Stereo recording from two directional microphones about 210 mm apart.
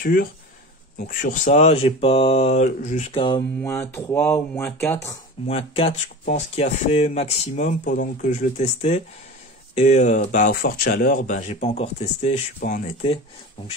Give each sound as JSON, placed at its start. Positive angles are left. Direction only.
{"t": 0.0, "sound": "speech", "side_deg": 45}
{"t": 3.3, "sound": "speech", "side_deg": 15}
{"t": 5.5, "sound": "speech", "side_deg": 30}